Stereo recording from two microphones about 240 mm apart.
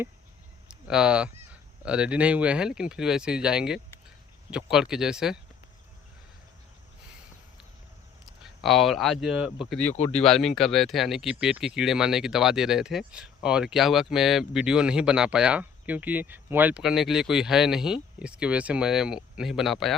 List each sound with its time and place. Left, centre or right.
0.7 s speech: centre
8.6 s speech: centre
9.9 s speech: left
10.2 s speech: centre